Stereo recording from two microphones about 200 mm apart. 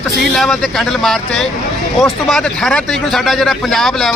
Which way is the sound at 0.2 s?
Centre (ahead or behind).